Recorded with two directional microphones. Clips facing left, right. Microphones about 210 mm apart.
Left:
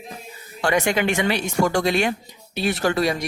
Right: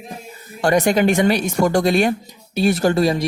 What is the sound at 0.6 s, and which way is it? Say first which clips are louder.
Speech: right 5 dB; 40° right (ahead or behind).